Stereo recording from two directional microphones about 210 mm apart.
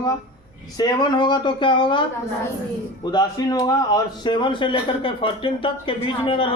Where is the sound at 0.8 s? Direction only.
20° left (ahead or behind).